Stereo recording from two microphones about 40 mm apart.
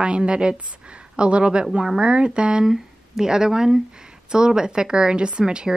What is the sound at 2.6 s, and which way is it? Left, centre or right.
Speech, centre.